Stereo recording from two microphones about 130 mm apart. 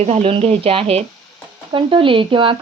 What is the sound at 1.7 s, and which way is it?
Speech, 40° right (ahead or behind).